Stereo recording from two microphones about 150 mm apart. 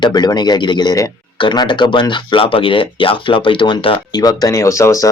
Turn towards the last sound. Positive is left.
turn(degrees=20)  # may be behind; listen again after turning